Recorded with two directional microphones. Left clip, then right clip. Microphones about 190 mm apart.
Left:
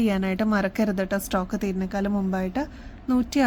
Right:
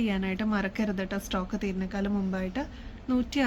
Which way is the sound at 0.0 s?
60° left (ahead or behind).